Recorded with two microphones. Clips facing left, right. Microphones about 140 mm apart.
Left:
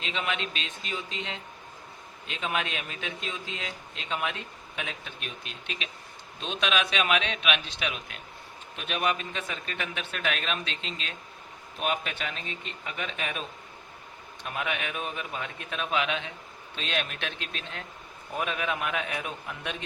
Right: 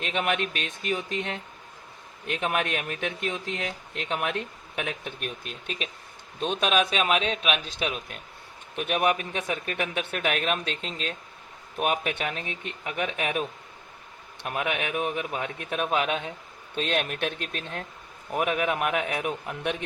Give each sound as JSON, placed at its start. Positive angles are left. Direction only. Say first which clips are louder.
{"t": 0.0, "sound": "a man's voice", "louder": "right 5 dB", "side_deg": -55}
{"t": 8.7, "sound": "speech", "louder": "right 5 dB", "side_deg": -55}
{"t": 14.5, "sound": "speech", "louder": "right 4 dB", "side_deg": -60}